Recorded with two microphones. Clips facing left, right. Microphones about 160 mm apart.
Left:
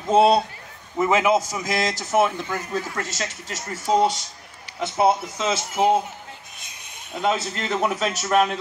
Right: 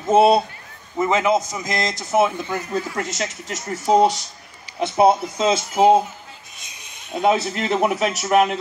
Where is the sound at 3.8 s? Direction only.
15° right (ahead or behind).